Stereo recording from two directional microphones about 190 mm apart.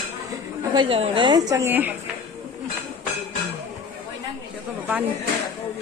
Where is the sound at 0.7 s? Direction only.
30° right (ahead or behind); by 1.9 s 10° right (ahead or behind).